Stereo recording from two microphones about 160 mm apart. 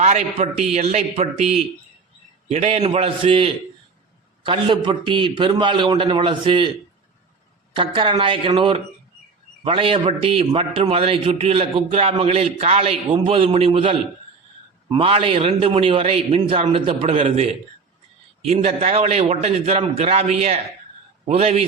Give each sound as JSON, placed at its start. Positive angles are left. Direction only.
{"t": 0.0, "sound": "a man's voice", "side_deg": -45}
{"t": 7.8, "sound": "a man's voice", "side_deg": -35}